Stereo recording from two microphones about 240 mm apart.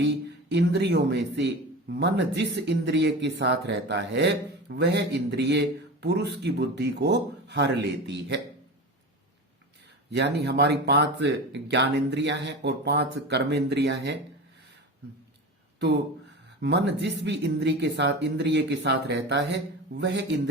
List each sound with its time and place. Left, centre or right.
0.5 s a man's voice: right
10.1 s a man's voice: right
16.6 s a man's voice: right